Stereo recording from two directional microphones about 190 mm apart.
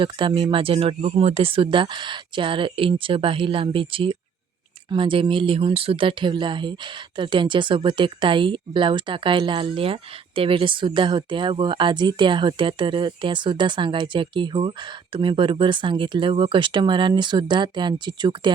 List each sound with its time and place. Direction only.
0.0 s speech: 25° right (ahead or behind)